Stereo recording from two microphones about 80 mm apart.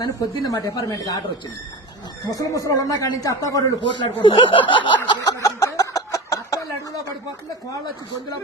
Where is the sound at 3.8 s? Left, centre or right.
Left.